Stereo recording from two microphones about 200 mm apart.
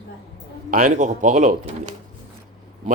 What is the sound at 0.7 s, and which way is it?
Speech, 40° right (ahead or behind).